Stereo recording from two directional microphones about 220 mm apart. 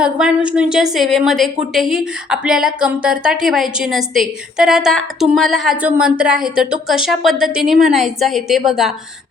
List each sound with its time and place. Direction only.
0.0 s a woman's voice: 5° right (ahead or behind)